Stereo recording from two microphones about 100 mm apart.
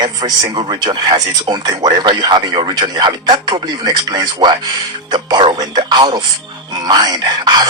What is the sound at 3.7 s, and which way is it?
Speech, 35° right (ahead or behind).